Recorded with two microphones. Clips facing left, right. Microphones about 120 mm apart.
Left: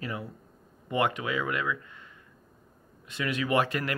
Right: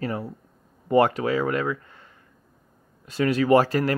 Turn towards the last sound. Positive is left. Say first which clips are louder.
# right 8 dB
turn(degrees=-35)  # may be behind; listen again after turning